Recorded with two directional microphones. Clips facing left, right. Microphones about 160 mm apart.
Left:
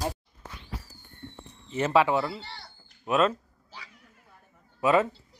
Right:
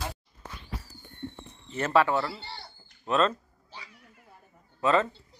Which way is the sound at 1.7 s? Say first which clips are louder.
Left 1 dB; 10° left (ahead or behind).